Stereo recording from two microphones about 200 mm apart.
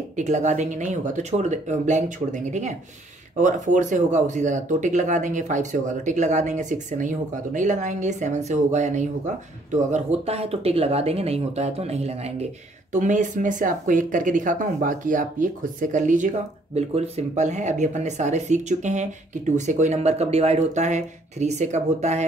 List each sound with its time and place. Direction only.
0.1 s speech: 35° right (ahead or behind)